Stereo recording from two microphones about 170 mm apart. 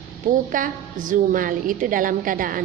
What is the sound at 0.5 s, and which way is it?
A woman's voice, 50° right (ahead or behind).